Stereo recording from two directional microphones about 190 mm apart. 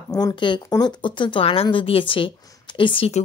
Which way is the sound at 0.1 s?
20° left (ahead or behind).